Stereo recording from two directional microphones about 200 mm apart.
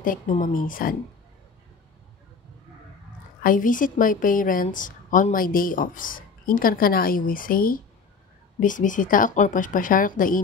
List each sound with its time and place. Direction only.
0.0 s a woman's voice: 40° left (ahead or behind)
3.4 s a woman's voice: 40° left (ahead or behind)